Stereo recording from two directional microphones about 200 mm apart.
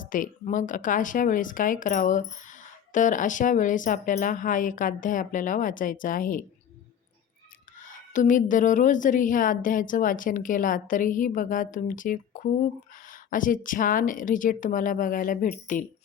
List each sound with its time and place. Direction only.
0.0 s a woman's voice: 40° left (ahead or behind)
8.1 s a woman's voice: 40° left (ahead or behind)